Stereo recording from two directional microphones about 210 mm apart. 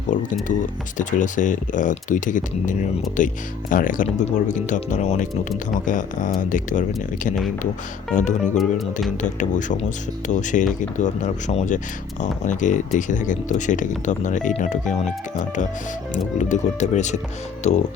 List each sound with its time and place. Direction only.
0.1 s speech: 40° left (ahead or behind)
8.1 s speech: 35° left (ahead or behind)
8.5 s music: centre (ahead or behind)
9.2 s speech: 35° left (ahead or behind)
16.1 s speech: 35° left (ahead or behind)